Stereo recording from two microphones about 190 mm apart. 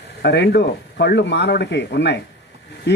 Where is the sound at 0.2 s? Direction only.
60° left (ahead or behind).